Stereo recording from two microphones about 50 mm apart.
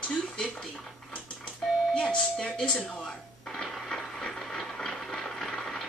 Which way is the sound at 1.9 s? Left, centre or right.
Centre.